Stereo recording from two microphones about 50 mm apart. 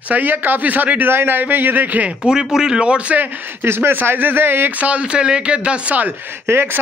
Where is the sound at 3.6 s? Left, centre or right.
Right.